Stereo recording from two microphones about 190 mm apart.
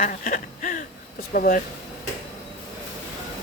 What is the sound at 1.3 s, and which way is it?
Speech, 50° left (ahead or behind).